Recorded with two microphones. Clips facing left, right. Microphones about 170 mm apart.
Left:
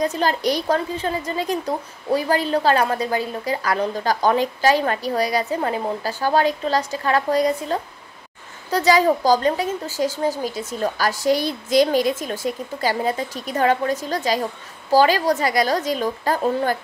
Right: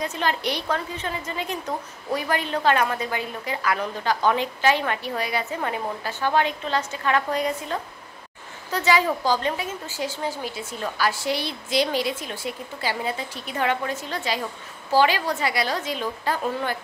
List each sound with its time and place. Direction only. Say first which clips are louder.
0.0 s a woman's voice: left 5 dB; 35° left (ahead or behind)